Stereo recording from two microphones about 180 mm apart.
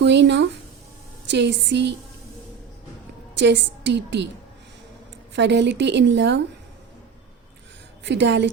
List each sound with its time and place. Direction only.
0.0 s a woman's voice: 75° right (ahead or behind)
3.3 s a woman's voice: 85° right
5.3 s a woman's voice: 80° right
8.0 s a woman's voice: 80° right